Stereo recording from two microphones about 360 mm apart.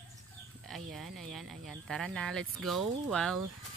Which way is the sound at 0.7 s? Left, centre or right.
Centre.